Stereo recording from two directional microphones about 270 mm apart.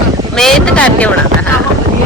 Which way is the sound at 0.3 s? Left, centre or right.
Centre.